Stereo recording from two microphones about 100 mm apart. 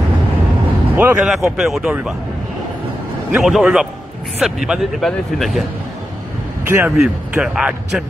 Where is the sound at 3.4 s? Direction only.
Centre (ahead or behind).